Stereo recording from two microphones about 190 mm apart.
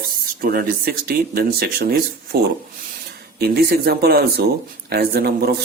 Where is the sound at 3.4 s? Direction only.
55° right (ahead or behind).